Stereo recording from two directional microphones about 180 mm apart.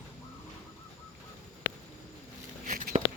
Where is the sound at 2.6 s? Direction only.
45° right (ahead or behind).